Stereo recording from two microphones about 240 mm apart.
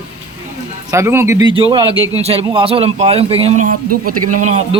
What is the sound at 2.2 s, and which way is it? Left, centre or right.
A man's voice, right.